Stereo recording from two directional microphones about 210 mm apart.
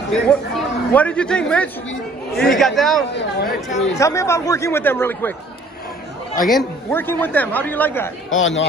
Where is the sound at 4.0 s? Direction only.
15° left (ahead or behind).